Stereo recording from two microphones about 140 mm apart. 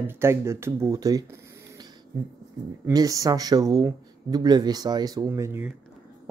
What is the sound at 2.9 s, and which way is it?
Speech, 25° right (ahead or behind).